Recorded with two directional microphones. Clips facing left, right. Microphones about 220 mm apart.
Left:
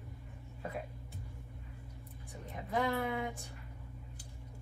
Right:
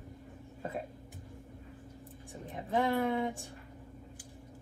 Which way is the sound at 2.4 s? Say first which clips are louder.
Right 3 dB; 25° right (ahead or behind).